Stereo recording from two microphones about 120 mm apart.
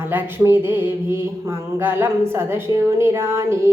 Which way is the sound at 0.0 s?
15° right (ahead or behind).